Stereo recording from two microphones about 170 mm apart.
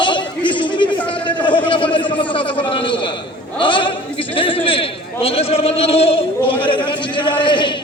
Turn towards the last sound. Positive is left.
turn(degrees=30)  # may be behind; listen again after turning